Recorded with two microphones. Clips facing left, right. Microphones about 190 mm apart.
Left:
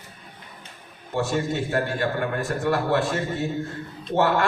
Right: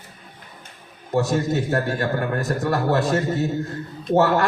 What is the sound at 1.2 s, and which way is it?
A man's voice, 40° right (ahead or behind).